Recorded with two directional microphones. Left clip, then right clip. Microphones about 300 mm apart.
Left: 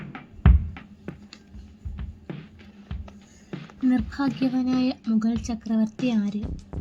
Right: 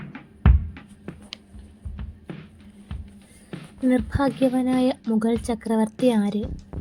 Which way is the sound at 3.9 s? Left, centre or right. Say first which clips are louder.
Right 4 dB; centre.